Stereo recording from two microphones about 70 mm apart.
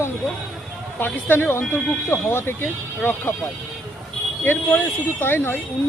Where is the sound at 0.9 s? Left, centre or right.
Left.